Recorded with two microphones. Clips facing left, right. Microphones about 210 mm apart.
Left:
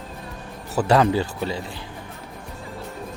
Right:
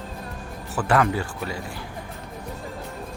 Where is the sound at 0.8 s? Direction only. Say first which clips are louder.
Left 4 dB; 25° left (ahead or behind).